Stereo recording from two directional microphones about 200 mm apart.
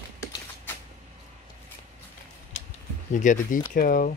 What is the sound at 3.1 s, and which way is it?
Speech, 40° left (ahead or behind).